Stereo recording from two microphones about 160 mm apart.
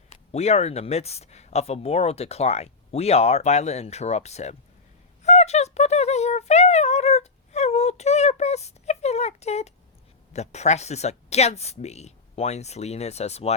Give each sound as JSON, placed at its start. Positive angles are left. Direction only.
{"t": 0.3, "sound": "speech", "side_deg": 40}